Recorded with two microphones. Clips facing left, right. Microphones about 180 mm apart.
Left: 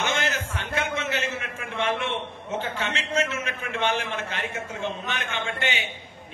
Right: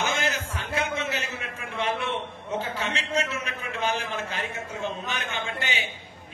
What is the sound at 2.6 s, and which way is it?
A man's voice, 35° right (ahead or behind).